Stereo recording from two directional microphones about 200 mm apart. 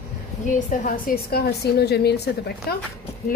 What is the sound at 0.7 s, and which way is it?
A woman's voice, 45° left (ahead or behind).